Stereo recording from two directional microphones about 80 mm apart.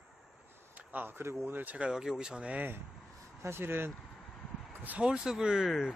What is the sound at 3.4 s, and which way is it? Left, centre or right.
Speech, right.